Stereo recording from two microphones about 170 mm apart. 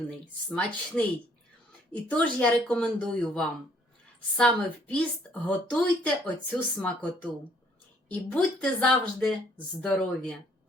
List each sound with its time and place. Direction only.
0.5 s a woman's voice: 5° left (ahead or behind)
8.3 s a woman's voice: 5° left (ahead or behind)